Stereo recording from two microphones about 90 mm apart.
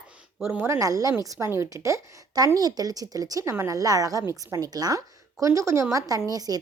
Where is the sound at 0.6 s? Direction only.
35° right (ahead or behind).